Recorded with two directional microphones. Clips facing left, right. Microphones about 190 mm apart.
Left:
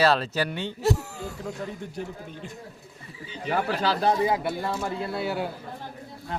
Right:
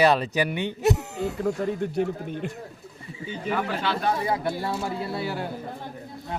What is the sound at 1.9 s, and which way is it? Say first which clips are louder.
Speech: right 9 dB; 65° right (ahead or behind).